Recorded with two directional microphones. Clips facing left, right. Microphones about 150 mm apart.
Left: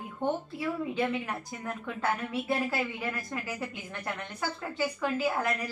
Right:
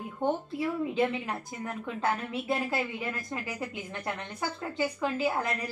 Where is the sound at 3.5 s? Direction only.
20° right (ahead or behind).